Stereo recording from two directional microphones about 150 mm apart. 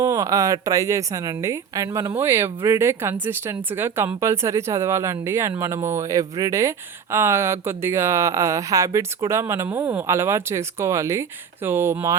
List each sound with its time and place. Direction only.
0.0 s speech: 20° right (ahead or behind)